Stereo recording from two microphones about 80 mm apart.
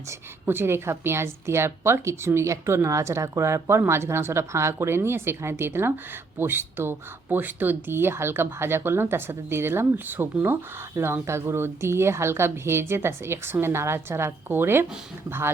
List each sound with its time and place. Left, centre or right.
0.1 s a woman's voice: right